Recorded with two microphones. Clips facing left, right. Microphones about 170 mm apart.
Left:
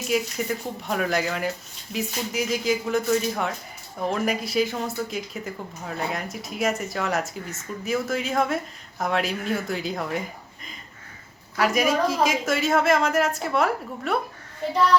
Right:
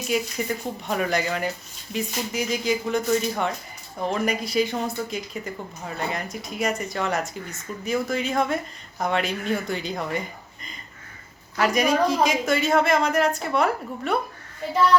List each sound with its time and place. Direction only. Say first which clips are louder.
0.1 s speech: left 1 dB; centre (ahead or behind)